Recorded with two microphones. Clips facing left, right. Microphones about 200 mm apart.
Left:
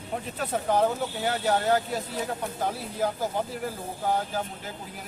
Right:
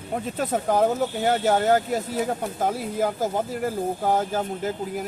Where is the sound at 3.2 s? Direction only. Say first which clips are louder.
Right 4 dB; 45° right (ahead or behind).